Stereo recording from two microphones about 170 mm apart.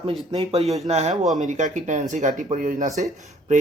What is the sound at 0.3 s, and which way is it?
Speech, 35° right (ahead or behind).